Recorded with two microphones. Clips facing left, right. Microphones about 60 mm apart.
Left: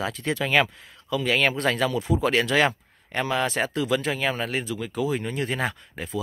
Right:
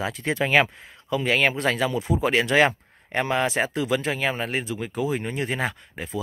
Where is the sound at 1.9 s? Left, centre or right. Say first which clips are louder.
Even; right.